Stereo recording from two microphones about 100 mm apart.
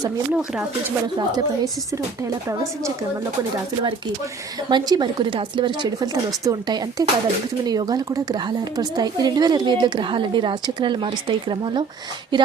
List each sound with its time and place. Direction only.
1.3 s speech: 45° right (ahead or behind)
4.7 s speech: 45° right (ahead or behind)
6.4 s speech: 35° right (ahead or behind); by 11.9 s 55° right (ahead or behind)